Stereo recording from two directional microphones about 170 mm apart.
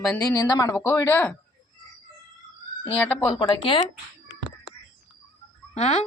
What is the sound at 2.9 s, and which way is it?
Speech, 10° left (ahead or behind).